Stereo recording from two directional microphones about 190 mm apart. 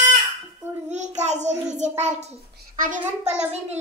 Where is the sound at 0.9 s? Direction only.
40° right (ahead or behind).